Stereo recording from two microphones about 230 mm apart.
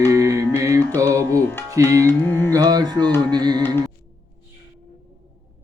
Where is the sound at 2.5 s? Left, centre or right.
Centre.